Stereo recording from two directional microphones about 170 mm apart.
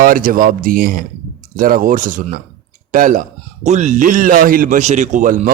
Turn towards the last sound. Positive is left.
turn(degrees=-50)  # may be behind; listen again after turning